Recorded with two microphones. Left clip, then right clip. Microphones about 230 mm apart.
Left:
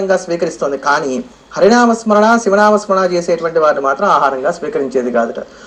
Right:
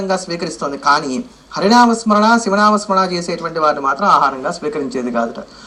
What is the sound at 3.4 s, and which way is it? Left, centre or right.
Speech, right.